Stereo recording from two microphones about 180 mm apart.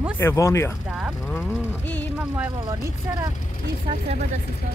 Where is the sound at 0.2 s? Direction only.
15° left (ahead or behind).